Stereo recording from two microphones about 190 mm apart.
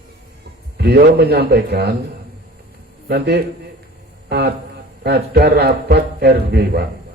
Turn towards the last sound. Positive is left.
turn(degrees=-60)  # may be behind; listen again after turning